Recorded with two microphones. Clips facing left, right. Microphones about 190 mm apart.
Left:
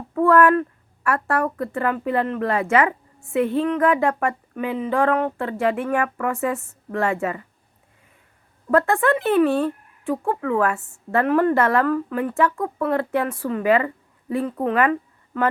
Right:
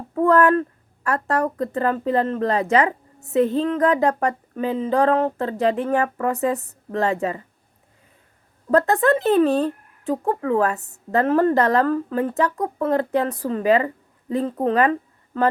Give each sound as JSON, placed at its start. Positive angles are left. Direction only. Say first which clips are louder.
{"t": 1.0, "sound": "speech", "louder": "even", "side_deg": -40}
{"t": 1.5, "sound": "speech", "louder": "right 2 dB", "side_deg": -20}
{"t": 1.7, "sound": "speech", "louder": "right 2 dB", "side_deg": -35}
{"t": 8.7, "sound": "speech", "louder": "right 1 dB", "side_deg": -40}